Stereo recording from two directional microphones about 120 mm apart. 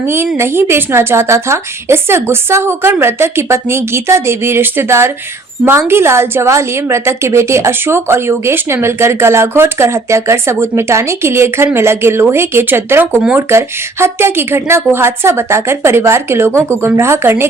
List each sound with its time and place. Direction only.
0.3 s a woman's voice: 20° right (ahead or behind)